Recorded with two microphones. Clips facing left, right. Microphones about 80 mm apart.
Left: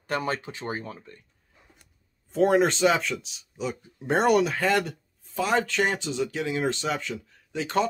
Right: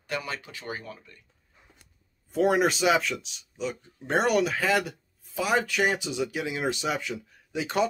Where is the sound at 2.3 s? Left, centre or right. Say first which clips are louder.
Left 2 dB; centre.